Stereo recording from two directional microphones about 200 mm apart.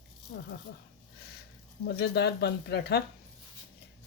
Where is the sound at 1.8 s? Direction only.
55° left (ahead or behind).